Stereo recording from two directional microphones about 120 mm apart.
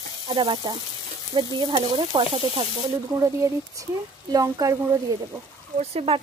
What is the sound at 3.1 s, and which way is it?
Speech, 25° right (ahead or behind).